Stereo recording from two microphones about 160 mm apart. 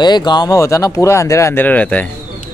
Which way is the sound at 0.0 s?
25° left (ahead or behind).